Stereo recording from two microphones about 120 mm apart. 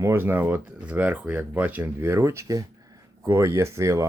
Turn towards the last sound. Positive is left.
turn(degrees=-25)  # may be behind; listen again after turning